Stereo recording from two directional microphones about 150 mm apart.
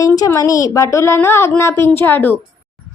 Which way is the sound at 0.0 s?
20° left (ahead or behind).